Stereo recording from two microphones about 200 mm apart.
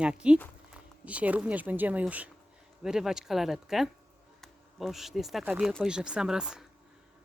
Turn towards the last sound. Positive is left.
turn(degrees=-5)  # may be behind; listen again after turning